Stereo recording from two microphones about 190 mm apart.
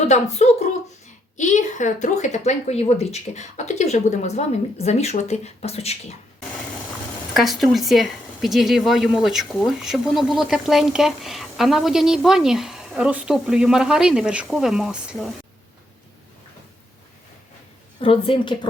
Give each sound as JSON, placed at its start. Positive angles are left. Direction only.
{"t": 0.1, "sound": "a woman's voice", "side_deg": 35}
{"t": 7.3, "sound": "speech", "side_deg": 0}
{"t": 18.0, "sound": "a woman's voice", "side_deg": 30}